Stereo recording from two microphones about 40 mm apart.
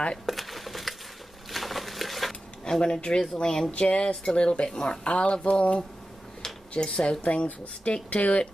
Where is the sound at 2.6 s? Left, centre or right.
Left.